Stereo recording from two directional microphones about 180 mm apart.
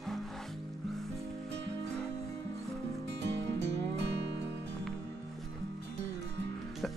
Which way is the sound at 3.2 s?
75° right (ahead or behind).